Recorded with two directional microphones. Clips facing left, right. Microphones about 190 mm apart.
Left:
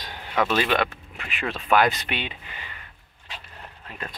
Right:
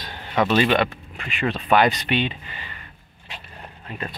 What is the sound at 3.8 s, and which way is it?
Speech, 10° right (ahead or behind).